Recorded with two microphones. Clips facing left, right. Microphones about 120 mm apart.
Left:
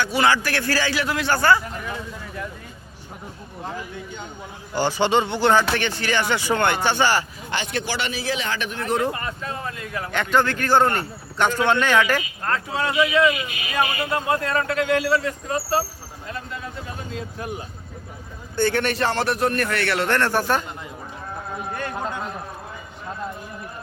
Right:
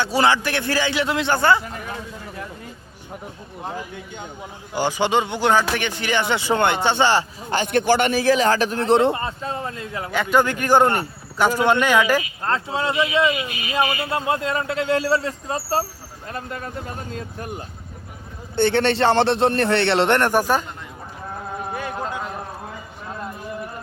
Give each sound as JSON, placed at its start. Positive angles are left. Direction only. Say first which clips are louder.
{"t": 0.0, "sound": "a man's voice", "louder": "right 1 dB", "side_deg": -30}
{"t": 4.7, "sound": "speech", "louder": "even", "side_deg": -15}
{"t": 7.5, "sound": "a man's voice", "louder": "right 8 dB", "side_deg": -50}
{"t": 10.1, "sound": "speech", "louder": "right 2 dB", "side_deg": -10}
{"t": 12.4, "sound": "a man's voice", "louder": "right 1 dB", "side_deg": -25}
{"t": 16.3, "sound": "vehicle", "louder": "right 3 dB", "side_deg": -50}
{"t": 18.5, "sound": "a man's voice", "louder": "right 3 dB", "side_deg": -25}